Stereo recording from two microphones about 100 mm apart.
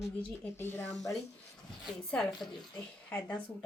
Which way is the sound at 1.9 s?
5° left (ahead or behind).